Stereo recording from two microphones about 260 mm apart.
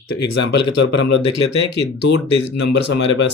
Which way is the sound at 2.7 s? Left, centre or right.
Left.